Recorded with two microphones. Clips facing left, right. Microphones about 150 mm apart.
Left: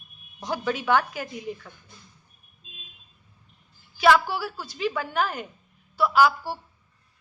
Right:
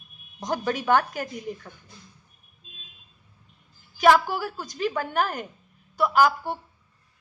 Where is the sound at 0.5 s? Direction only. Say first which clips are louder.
Right 1 dB; 45° right (ahead or behind).